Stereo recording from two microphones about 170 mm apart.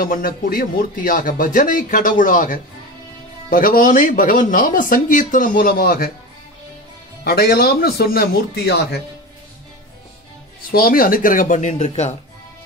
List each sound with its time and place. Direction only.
0.0 s speech: 55° left (ahead or behind)
7.2 s speech: 65° left (ahead or behind)
10.7 s speech: 60° left (ahead or behind); by 12.2 s 40° left (ahead or behind)